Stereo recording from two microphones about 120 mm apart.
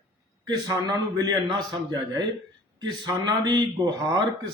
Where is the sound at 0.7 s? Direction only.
35° right (ahead or behind).